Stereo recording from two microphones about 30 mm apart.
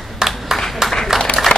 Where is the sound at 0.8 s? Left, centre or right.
Centre.